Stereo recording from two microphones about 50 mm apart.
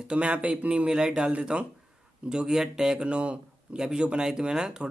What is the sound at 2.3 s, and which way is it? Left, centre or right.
A man's voice, centre.